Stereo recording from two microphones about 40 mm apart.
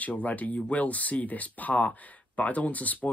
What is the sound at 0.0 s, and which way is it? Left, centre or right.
Speech, left.